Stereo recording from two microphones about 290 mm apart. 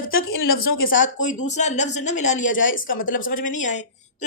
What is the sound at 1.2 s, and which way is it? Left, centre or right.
A woman's voice, left.